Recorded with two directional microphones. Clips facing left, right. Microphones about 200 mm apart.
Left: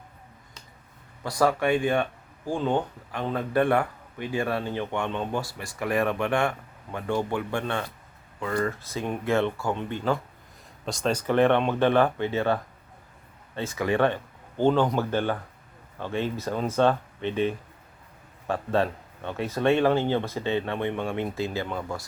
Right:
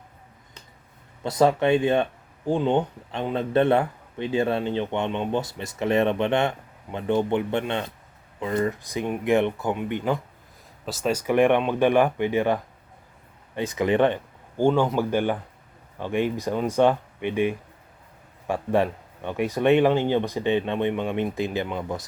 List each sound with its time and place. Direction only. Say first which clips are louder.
1.2 s speech: right 3 dB; 25° right (ahead or behind)
13.6 s speech: right 3 dB; 20° right (ahead or behind)